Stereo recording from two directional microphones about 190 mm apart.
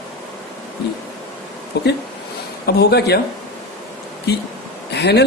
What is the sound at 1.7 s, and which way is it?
A man's voice, 60° left (ahead or behind).